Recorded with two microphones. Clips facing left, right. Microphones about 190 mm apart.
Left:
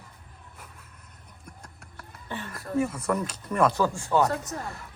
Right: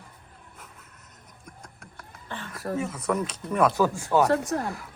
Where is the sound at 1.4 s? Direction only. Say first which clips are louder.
Right 1 dB; 5° left (ahead or behind).